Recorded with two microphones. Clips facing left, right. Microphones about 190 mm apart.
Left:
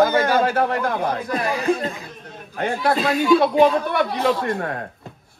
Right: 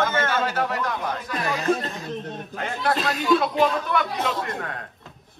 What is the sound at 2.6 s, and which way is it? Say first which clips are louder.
A man's voice: left 5 dB; 50° left (ahead or behind).